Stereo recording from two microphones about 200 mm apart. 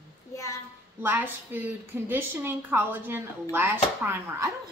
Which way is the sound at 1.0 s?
10° right (ahead or behind).